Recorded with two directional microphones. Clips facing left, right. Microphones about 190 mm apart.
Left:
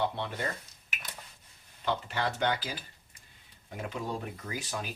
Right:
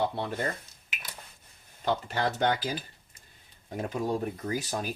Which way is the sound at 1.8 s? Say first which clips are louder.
Right 3 dB; 40° right (ahead or behind).